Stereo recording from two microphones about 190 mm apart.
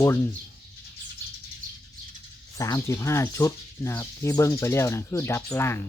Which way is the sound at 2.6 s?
15° left (ahead or behind).